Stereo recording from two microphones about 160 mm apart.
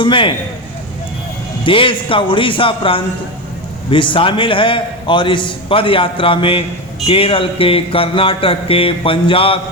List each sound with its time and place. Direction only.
0.0 s a man's voice: 30° left (ahead or behind)
1.6 s a man's voice: 35° left (ahead or behind)